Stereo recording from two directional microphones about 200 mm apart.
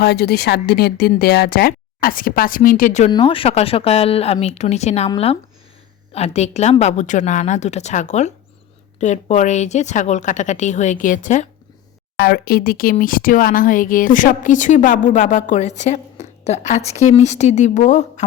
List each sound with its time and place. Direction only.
0.0 s speech: 55° left (ahead or behind); by 3.1 s 40° left (ahead or behind)
3.1 s speech: 25° left (ahead or behind)
12.1 s speech: 55° left (ahead or behind); by 18.3 s 35° left (ahead or behind)